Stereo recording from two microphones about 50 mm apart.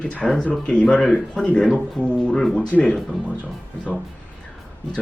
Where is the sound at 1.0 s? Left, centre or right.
Centre.